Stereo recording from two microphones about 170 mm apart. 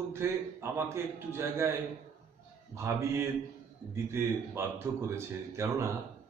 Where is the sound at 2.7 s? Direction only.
15° right (ahead or behind).